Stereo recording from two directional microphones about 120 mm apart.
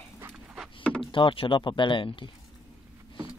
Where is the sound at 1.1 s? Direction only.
45° left (ahead or behind).